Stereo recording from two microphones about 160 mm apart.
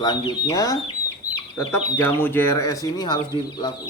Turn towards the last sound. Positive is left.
turn(degrees=30)  # may be behind; listen again after turning